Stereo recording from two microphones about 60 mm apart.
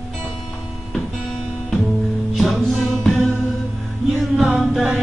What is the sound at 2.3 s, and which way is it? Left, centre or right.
Music, centre.